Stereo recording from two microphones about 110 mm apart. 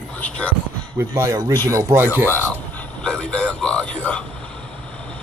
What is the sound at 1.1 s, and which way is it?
Speech, 30° right (ahead or behind).